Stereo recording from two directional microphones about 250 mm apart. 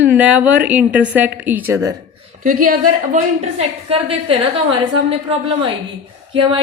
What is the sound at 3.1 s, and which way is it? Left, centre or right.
Speech, right.